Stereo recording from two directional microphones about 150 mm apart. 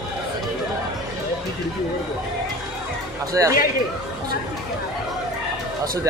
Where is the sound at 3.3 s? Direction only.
20° right (ahead or behind).